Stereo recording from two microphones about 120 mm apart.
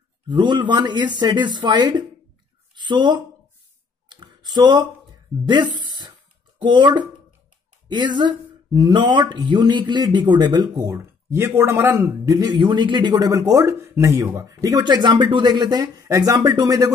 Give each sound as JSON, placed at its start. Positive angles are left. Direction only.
{"t": 0.3, "sound": "speech", "side_deg": -40}
{"t": 4.1, "sound": "a sound", "side_deg": -40}
{"t": 5.5, "sound": "speech", "side_deg": -35}
{"t": 12.4, "sound": "speech", "side_deg": -35}